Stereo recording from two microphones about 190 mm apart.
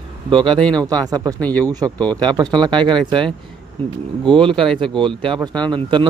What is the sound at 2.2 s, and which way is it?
Speech, 25° right (ahead or behind).